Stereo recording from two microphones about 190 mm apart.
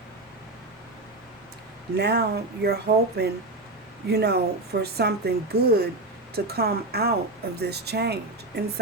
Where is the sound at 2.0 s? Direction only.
60° right (ahead or behind).